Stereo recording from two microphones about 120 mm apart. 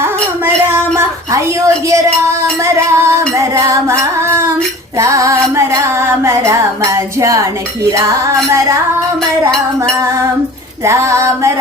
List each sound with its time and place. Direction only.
0.0 s a woman's voice: 20° right (ahead or behind)
4.9 s music: 25° right (ahead or behind)
10.8 s music: 25° right (ahead or behind)